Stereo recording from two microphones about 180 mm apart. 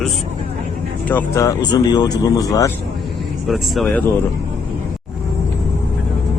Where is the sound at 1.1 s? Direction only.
15° left (ahead or behind).